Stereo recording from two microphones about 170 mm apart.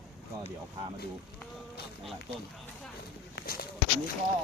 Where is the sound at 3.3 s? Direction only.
65° left (ahead or behind).